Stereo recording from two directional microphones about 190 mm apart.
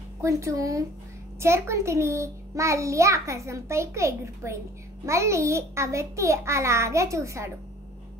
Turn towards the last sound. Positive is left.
turn(degrees=-15)  # may be behind; listen again after turning